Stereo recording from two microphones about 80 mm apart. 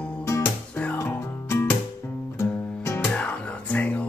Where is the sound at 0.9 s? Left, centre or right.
Left.